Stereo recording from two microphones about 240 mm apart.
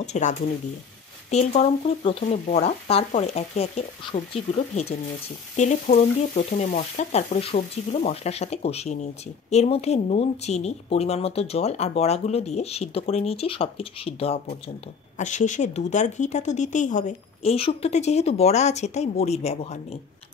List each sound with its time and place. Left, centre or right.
0.0 s speech: left